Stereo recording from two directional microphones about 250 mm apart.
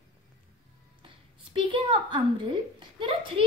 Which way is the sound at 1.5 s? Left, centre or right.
Centre.